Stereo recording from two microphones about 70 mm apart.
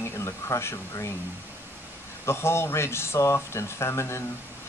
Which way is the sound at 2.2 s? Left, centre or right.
Left.